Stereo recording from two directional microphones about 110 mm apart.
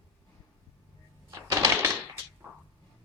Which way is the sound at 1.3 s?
30° right (ahead or behind).